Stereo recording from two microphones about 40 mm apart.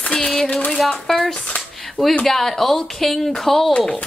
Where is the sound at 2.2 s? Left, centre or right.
Centre.